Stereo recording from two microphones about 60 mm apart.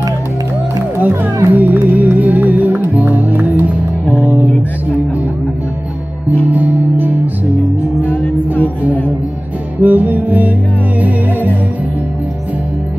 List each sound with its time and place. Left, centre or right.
0.9 s music: right
6.5 s music: right
8.1 s music: left
9.8 s music: right